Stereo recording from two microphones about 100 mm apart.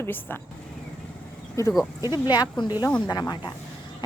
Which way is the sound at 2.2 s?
45° left (ahead or behind).